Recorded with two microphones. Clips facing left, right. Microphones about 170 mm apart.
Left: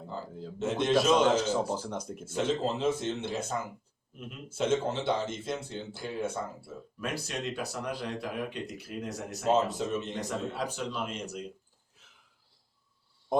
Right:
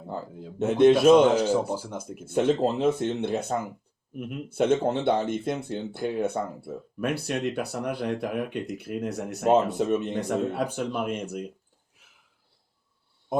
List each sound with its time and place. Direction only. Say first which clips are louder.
0.6 s speech: right 9 dB; 60° right (ahead or behind)
1.7 s speech: right 2 dB; 10° right (ahead or behind)
2.2 s speech: right 7 dB; 60° right (ahead or behind)